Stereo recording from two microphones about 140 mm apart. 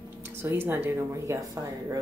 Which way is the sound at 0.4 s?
15° right (ahead or behind).